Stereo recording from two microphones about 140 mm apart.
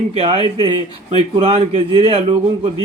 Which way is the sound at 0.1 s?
40° right (ahead or behind).